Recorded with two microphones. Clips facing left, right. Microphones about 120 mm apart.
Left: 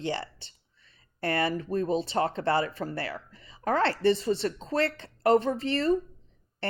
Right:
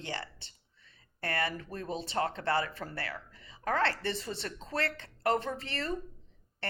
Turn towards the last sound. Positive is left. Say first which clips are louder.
# left 9 dB
turn(degrees=25)  # may be behind; listen again after turning